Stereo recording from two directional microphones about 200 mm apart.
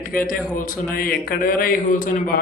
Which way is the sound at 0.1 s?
45° left (ahead or behind).